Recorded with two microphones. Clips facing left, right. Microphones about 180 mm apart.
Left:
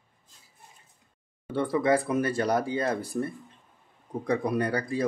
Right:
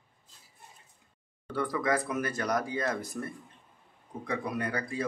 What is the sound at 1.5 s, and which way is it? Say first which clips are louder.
Speech: left 5 dB; 25° left (ahead or behind).